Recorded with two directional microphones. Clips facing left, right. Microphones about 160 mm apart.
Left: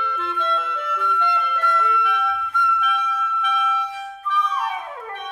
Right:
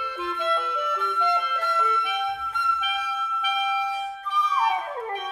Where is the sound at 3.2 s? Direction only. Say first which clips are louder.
Left 3 dB; 10° right (ahead or behind).